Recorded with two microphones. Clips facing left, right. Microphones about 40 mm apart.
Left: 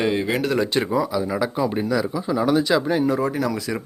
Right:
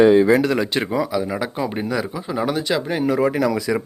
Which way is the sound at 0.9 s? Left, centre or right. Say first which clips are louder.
Right 1 dB; right.